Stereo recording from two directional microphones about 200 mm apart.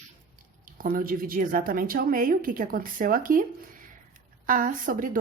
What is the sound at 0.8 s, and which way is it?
A woman's voice, 45° right (ahead or behind).